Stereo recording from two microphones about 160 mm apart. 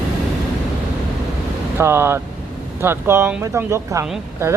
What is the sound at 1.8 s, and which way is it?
Speech, 15° right (ahead or behind).